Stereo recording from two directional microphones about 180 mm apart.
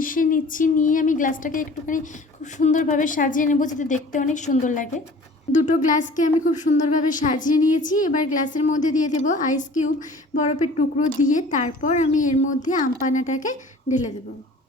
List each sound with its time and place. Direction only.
0.0 s speech: 50° left (ahead or behind)